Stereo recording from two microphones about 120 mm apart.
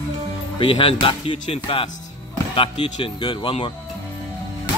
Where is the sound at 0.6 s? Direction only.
50° left (ahead or behind).